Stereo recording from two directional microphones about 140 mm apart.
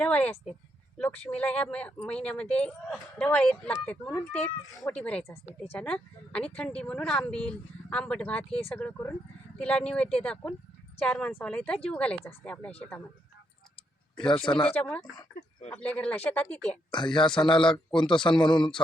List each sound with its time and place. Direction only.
0.0 s speech: 10° left (ahead or behind)
14.5 s speech: 10° left (ahead or behind)
16.9 s a man's voice: 35° left (ahead or behind)